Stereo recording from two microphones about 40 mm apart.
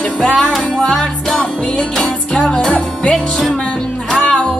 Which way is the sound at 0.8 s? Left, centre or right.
Left.